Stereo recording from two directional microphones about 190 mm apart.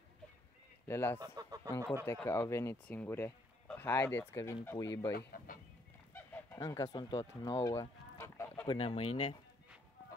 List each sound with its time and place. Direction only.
0.8 s speech: 10° left (ahead or behind)
1.2 s speech: 20° right (ahead or behind)
2.0 s speech: 10° left (ahead or behind)
5.1 s speech: 50° left (ahead or behind)
6.1 s honk: 10° left (ahead or behind)
8.7 s speech: 30° left (ahead or behind)